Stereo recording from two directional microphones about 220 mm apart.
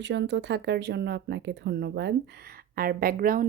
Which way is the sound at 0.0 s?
55° right (ahead or behind).